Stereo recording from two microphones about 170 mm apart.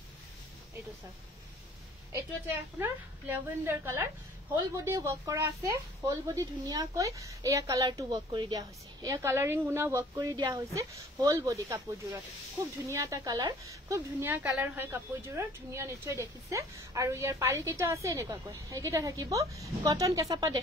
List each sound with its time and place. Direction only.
2.4 s a woman's voice: 10° right (ahead or behind)